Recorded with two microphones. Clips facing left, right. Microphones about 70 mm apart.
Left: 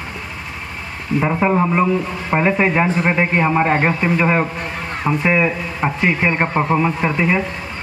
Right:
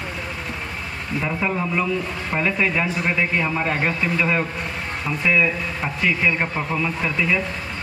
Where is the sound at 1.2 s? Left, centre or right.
Left.